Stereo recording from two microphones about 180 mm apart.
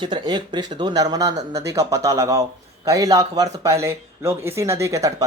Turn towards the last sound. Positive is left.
turn(degrees=-15)  # may be behind; listen again after turning